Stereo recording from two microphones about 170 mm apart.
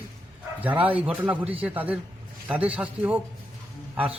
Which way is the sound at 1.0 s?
10° right (ahead or behind).